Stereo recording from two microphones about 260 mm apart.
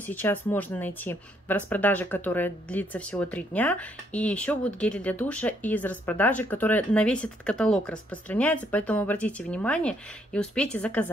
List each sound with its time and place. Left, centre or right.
0.0 s speech: centre